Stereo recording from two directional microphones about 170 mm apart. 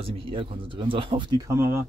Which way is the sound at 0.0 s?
30° right (ahead or behind).